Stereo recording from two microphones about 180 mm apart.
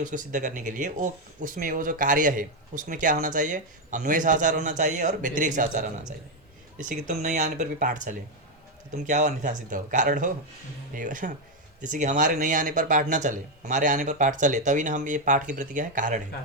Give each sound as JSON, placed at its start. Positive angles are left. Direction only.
{"t": 0.0, "sound": "speech", "side_deg": -45}
{"t": 6.8, "sound": "speech", "side_deg": -45}